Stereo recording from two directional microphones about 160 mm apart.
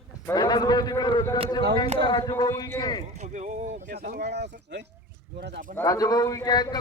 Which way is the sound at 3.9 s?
85° right.